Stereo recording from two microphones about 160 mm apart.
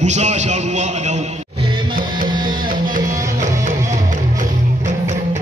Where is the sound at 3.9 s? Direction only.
50° right (ahead or behind).